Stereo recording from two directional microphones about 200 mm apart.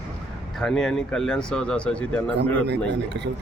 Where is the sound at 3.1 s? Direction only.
65° right (ahead or behind).